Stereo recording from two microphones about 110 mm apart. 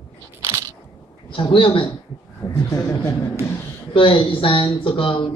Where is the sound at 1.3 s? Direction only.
50° left (ahead or behind).